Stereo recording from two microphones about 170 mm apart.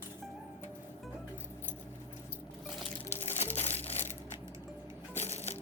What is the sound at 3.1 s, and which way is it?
Music, 40° left (ahead or behind).